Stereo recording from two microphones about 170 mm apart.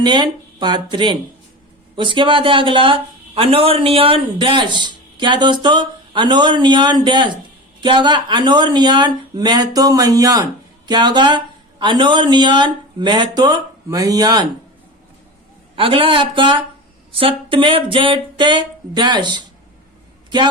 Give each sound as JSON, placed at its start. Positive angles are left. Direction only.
{"t": 0.0, "sound": "speech", "side_deg": -25}
{"t": 15.7, "sound": "speech", "side_deg": -30}